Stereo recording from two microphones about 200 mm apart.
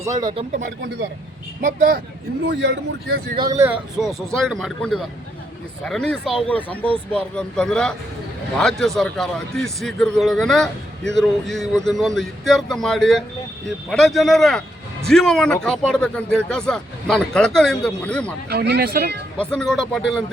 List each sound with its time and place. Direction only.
0.2 s speech: 20° right (ahead or behind)
1.6 s speech: 40° right (ahead or behind)
2.5 s a man's voice: 65° right (ahead or behind)
3.3 s speech: 20° right (ahead or behind)
3.9 s speech: centre (ahead or behind)
18.4 s speech: 55° right (ahead or behind)
19.4 s speech: 5° left (ahead or behind)